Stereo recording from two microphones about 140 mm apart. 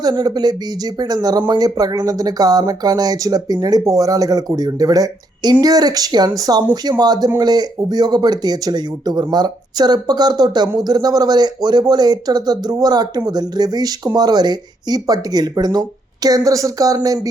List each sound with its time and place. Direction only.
0.0 s speech: 30° right (ahead or behind)